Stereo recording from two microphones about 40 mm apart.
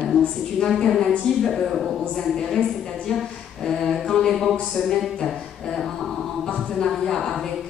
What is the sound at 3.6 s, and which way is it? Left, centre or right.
Speech, centre.